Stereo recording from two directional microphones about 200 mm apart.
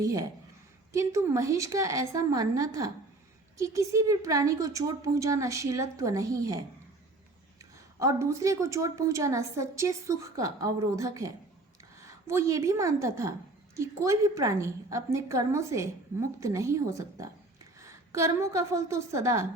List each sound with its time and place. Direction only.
0.0 s a woman's voice: 15° right (ahead or behind)
7.9 s a woman's voice: 15° right (ahead or behind)
12.3 s a woman's voice: 15° right (ahead or behind)